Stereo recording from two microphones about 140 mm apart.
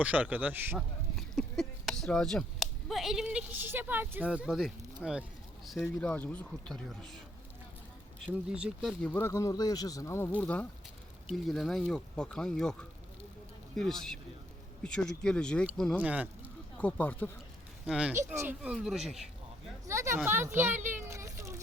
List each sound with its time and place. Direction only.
0.0 s speech: 10° right (ahead or behind)
0.8 s a sound: centre (ahead or behind)
3.2 s speech: 10° right (ahead or behind)
8.4 s speech: 5° right (ahead or behind)
9.0 s speech: 10° left (ahead or behind)
13.7 s speech: 5° left (ahead or behind)
16.0 s speech: 10° right (ahead or behind)
16.7 s speech: 10° left (ahead or behind)
17.8 s speech: 5° right (ahead or behind)
18.1 s speech: 20° right (ahead or behind); by 19.2 s centre (ahead or behind)
19.8 s a sound: 20° right (ahead or behind)
20.2 s speech: 15° right (ahead or behind)
20.9 s a sound: 20° right (ahead or behind)